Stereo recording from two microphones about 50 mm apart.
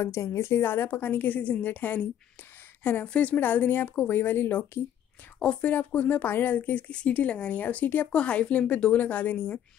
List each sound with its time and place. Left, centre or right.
0.0 s a woman's voice: left
3.1 s a woman's voice: left
6.9 s a woman's voice: left
8.1 s a woman's voice: left